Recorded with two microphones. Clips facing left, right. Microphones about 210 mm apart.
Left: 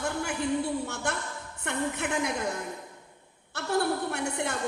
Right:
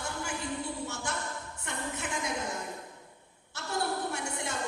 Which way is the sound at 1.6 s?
60° left (ahead or behind).